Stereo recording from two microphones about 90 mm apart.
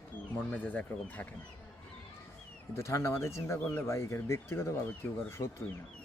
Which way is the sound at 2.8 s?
35° left (ahead or behind).